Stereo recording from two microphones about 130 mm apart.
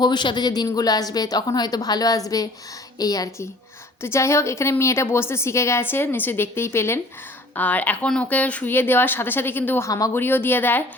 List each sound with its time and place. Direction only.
0.0 s a woman's voice: 35° left (ahead or behind); by 10.8 s 15° left (ahead or behind)